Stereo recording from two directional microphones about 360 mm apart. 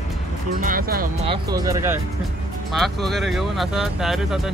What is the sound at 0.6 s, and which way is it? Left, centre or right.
Speech, right.